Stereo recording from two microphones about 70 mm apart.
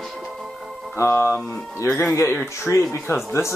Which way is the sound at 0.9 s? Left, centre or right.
Left.